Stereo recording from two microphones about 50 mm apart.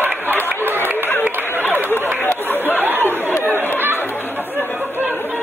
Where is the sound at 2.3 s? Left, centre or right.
Left.